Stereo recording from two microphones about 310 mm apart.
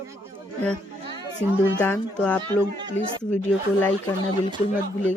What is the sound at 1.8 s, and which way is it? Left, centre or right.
Speech, centre.